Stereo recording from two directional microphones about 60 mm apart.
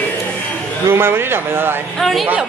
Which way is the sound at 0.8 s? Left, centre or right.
Right.